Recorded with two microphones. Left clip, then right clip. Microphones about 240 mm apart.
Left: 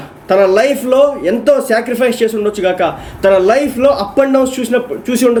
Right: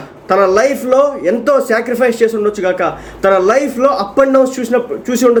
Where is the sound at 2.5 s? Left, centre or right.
Left.